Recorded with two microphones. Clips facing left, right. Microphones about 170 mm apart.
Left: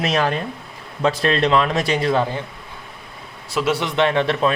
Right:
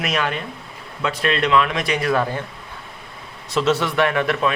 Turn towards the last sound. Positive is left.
turn(degrees=30)  # may be behind; listen again after turning